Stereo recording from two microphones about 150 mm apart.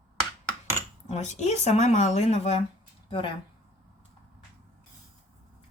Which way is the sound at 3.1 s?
35° left (ahead or behind).